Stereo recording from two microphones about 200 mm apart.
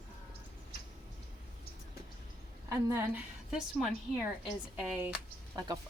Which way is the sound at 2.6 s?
10° right (ahead or behind).